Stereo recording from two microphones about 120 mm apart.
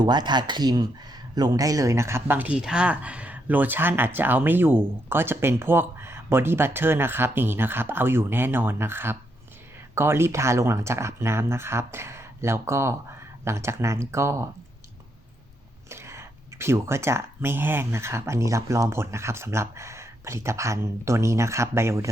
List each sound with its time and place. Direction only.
0.0 s speech: 40° right (ahead or behind)
15.9 s speech: 25° right (ahead or behind)